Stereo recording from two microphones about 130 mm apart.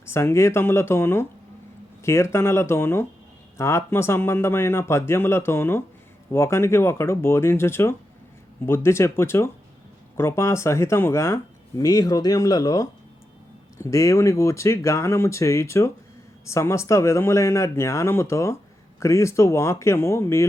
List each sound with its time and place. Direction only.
0.0 s speech: 20° left (ahead or behind)